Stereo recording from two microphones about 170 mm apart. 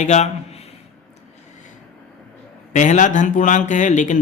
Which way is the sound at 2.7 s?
45° left (ahead or behind).